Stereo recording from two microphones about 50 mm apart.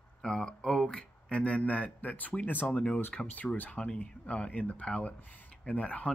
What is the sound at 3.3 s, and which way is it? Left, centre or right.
Speech, left.